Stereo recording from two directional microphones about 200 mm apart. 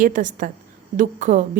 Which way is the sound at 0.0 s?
40° right (ahead or behind).